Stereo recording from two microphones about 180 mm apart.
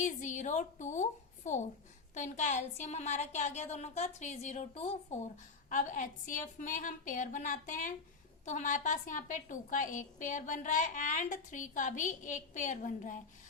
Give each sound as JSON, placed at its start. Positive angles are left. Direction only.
{"t": 0.0, "sound": "a woman's voice", "side_deg": 40}